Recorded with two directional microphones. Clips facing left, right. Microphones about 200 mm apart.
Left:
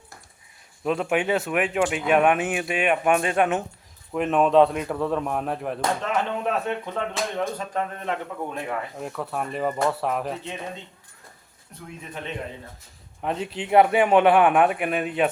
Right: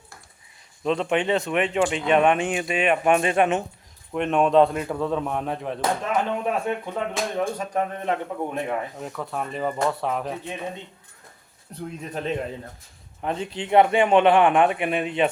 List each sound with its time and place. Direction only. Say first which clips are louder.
0.9 s speech: right 1 dB; 5° left (ahead or behind)
6.1 s speech: right 1 dB; 10° right (ahead or behind)
9.0 s speech: left 1 dB; centre (ahead or behind)
11.7 s speech: right 6 dB; 35° right (ahead or behind)
13.2 s speech: even; 5° left (ahead or behind)